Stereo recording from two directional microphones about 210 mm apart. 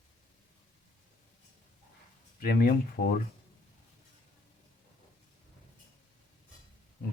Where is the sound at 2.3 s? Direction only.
45° left (ahead or behind).